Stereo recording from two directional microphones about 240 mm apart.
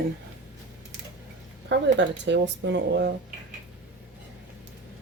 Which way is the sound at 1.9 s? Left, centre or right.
Right.